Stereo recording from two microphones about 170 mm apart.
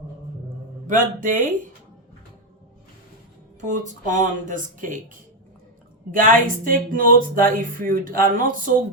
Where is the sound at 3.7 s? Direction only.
45° right (ahead or behind).